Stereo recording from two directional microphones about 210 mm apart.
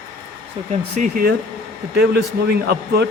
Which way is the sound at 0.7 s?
35° right (ahead or behind).